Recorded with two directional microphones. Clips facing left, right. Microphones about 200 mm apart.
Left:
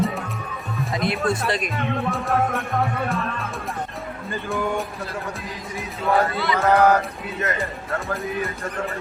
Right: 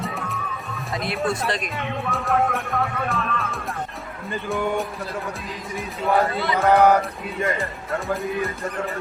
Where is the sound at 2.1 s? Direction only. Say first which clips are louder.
Right 3 dB; centre (ahead or behind).